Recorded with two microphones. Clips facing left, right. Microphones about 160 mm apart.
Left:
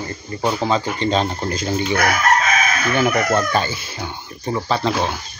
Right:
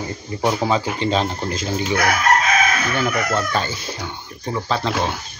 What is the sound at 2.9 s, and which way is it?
Speech, 15° left (ahead or behind).